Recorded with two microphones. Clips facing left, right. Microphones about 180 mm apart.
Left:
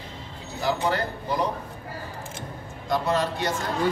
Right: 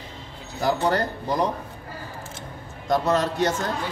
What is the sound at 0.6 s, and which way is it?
Speech, 45° right (ahead or behind).